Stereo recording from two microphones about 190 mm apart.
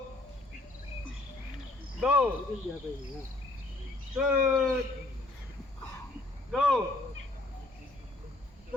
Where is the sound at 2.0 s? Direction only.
5° right (ahead or behind).